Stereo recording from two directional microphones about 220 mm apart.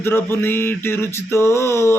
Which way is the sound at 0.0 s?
10° left (ahead or behind).